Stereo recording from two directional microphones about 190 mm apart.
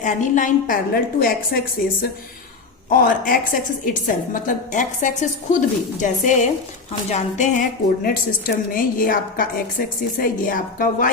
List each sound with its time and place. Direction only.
0.0 s a woman's voice: 40° left (ahead or behind)
7.1 s a sound: 40° left (ahead or behind)
8.0 s a woman's voice: 50° left (ahead or behind)